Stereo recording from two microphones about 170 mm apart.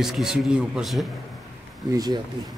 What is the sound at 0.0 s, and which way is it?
A man's voice, 5° right (ahead or behind).